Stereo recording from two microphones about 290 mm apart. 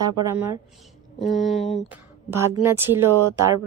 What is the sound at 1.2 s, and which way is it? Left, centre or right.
Speech, centre.